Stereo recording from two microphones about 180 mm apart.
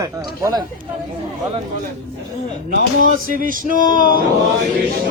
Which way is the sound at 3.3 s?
50° right (ahead or behind).